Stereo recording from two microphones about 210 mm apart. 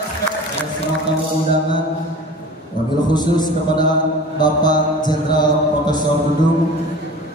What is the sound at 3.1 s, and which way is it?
Speech, 20° left (ahead or behind).